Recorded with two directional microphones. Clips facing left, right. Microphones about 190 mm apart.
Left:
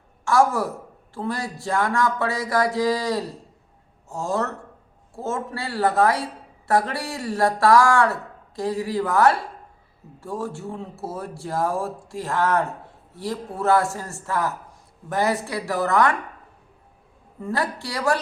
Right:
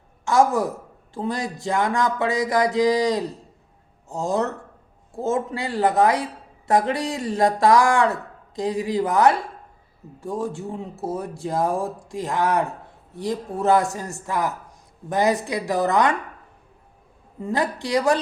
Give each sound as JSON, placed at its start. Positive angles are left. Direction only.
{"t": 0.3, "sound": "speech", "side_deg": -20}
{"t": 17.4, "sound": "a woman's voice", "side_deg": -20}